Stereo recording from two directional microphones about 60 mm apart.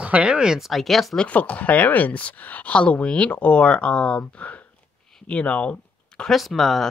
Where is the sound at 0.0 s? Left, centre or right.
Centre.